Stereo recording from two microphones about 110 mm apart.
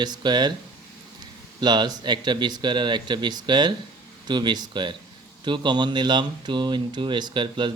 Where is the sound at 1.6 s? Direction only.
40° right (ahead or behind).